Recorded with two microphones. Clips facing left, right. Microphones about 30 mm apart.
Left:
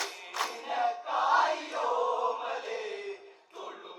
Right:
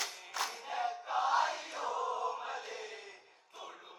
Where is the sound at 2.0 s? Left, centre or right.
Left.